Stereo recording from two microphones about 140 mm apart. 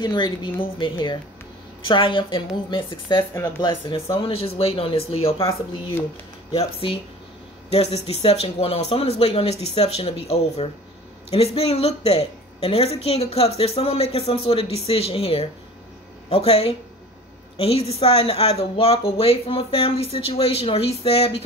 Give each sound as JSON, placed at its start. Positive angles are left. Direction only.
{"t": 0.0, "sound": "a woman's voice", "side_deg": 35}